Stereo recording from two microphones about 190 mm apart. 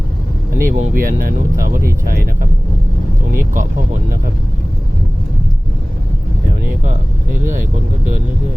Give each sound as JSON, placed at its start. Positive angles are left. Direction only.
{"t": 0.6, "sound": "speech", "side_deg": -45}